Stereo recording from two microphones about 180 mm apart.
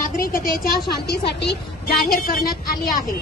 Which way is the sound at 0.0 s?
50° left (ahead or behind).